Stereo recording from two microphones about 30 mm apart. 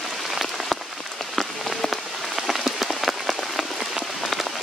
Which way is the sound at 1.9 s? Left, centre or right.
Centre.